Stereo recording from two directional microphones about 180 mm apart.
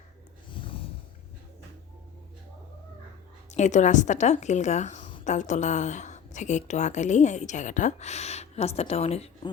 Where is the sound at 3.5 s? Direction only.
40° left (ahead or behind).